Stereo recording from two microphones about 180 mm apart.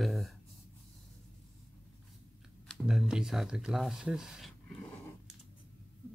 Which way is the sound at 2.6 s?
Centre (ahead or behind).